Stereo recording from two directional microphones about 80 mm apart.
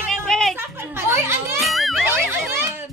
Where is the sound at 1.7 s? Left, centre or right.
Centre.